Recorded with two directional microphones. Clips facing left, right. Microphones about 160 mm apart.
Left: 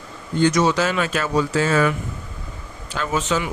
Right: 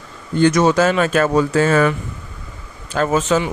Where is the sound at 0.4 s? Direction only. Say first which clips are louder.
Right 4 dB; 55° right (ahead or behind).